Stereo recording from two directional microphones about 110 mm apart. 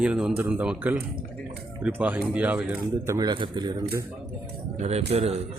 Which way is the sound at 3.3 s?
45° right (ahead or behind).